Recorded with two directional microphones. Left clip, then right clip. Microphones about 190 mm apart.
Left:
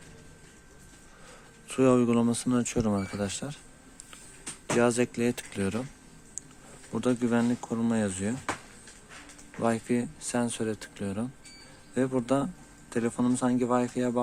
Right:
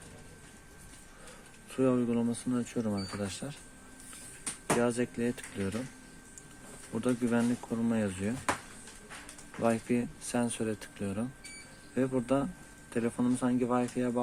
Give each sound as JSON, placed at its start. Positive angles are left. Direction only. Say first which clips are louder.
{"t": 1.7, "sound": "speech", "louder": "left 6 dB", "side_deg": 35}
{"t": 4.8, "sound": "speech", "louder": "left 9 dB", "side_deg": 30}
{"t": 6.9, "sound": "speech", "louder": "left 3 dB", "side_deg": 25}
{"t": 9.6, "sound": "speech", "louder": "left 2 dB", "side_deg": 15}